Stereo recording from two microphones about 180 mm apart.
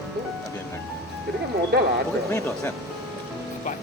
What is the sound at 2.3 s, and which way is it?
Speech, 15° left (ahead or behind).